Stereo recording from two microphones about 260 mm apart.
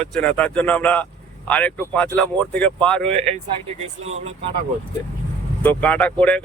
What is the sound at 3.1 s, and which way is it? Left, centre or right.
Speech, right.